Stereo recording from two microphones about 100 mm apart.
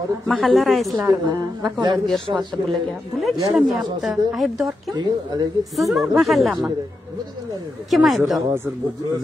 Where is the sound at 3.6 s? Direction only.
5° right (ahead or behind).